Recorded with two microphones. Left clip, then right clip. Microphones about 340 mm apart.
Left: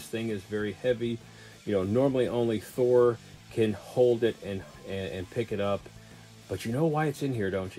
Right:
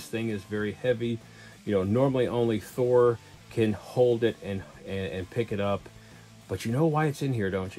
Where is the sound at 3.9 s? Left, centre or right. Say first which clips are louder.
Even; right.